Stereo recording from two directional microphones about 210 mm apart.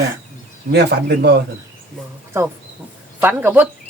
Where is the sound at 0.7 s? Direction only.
50° right (ahead or behind).